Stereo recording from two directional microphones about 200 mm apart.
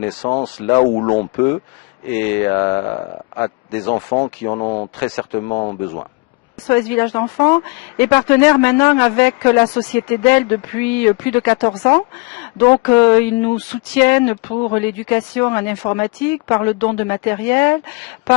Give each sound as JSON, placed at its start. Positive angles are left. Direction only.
{"t": 0.2, "sound": "speech", "side_deg": 25}
{"t": 4.9, "sound": "speech", "side_deg": 15}
{"t": 5.5, "sound": "speech", "side_deg": 25}
{"t": 6.7, "sound": "speech", "side_deg": 10}